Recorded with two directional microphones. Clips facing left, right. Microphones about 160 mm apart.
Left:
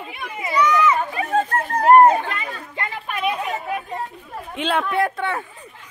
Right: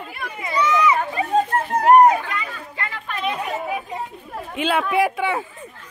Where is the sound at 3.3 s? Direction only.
5° right (ahead or behind).